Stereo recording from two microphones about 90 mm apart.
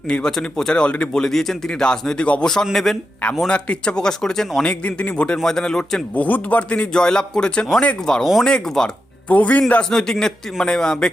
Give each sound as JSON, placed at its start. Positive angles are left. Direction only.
{"t": 0.1, "sound": "a man's voice", "side_deg": 5}
{"t": 6.1, "sound": "a man's voice", "side_deg": 15}
{"t": 9.3, "sound": "speech", "side_deg": 15}
{"t": 9.9, "sound": "speech", "side_deg": 5}